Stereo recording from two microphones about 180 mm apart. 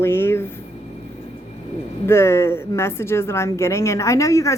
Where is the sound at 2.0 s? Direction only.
15° left (ahead or behind).